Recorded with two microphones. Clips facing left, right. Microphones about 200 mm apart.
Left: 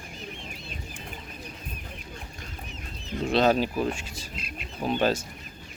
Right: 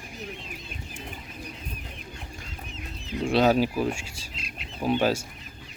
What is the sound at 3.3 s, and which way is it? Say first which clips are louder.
Speech: right 1 dB; 10° right (ahead or behind).